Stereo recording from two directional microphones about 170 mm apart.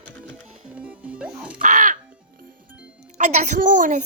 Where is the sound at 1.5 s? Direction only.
50° right (ahead or behind).